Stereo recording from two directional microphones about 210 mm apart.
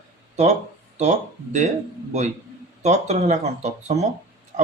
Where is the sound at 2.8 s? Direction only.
30° right (ahead or behind).